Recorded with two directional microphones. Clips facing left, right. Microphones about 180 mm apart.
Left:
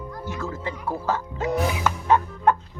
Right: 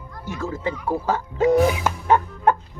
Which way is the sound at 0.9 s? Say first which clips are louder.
Right 2 dB; 15° right (ahead or behind).